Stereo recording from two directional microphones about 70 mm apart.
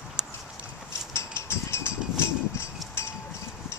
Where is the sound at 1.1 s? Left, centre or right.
Left.